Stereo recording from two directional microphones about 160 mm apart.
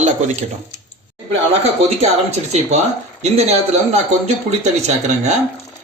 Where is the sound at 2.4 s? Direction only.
45° right (ahead or behind).